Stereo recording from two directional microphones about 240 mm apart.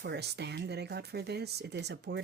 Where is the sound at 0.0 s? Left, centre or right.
Right.